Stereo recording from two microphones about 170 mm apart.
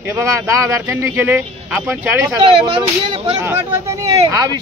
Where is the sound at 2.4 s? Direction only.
30° right (ahead or behind).